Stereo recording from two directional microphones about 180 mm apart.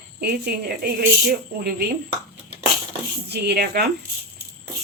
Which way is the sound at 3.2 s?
65° right (ahead or behind).